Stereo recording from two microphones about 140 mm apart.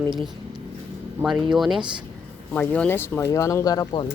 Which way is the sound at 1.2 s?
15° right (ahead or behind).